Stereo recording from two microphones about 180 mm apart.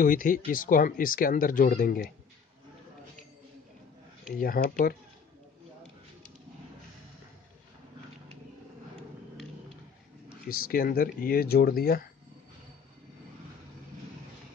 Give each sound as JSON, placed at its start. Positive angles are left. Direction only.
{"t": 0.0, "sound": "speech", "side_deg": 50}
{"t": 4.4, "sound": "speech", "side_deg": 55}
{"t": 10.5, "sound": "speech", "side_deg": 55}